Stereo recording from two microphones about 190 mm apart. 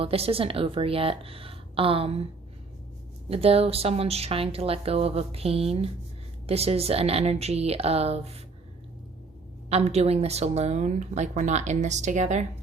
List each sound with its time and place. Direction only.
0.0 s a woman's voice: 30° right (ahead or behind)
3.2 s a woman's voice: 30° right (ahead or behind)
9.6 s a woman's voice: 35° right (ahead or behind)